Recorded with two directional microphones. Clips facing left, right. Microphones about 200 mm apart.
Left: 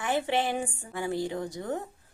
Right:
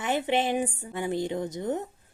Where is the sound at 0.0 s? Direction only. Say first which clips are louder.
Right 1 dB; 20° right (ahead or behind).